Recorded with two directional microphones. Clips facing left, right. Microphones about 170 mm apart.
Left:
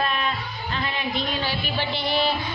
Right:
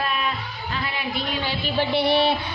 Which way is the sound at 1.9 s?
65° right (ahead or behind).